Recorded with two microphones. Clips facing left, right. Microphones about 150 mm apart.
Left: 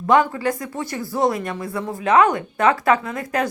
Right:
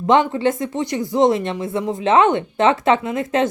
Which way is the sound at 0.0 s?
25° right (ahead or behind).